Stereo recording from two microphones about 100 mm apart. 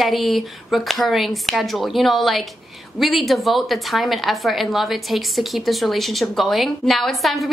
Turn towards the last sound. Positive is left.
turn(degrees=0)  # may be behind; listen again after turning